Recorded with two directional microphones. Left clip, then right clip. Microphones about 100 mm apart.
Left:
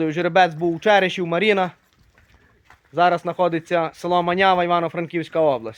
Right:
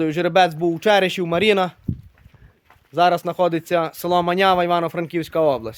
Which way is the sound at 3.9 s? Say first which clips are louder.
Right 1 dB; 60° right (ahead or behind).